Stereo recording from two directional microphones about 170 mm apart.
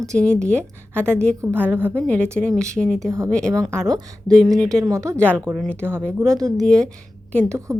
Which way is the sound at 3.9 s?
20° right (ahead or behind).